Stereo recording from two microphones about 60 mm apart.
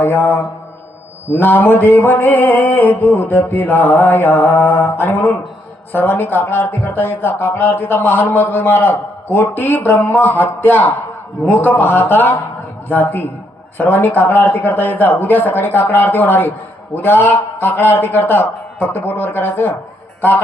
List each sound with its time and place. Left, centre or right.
0.0 s speech: left
2.2 s speech: left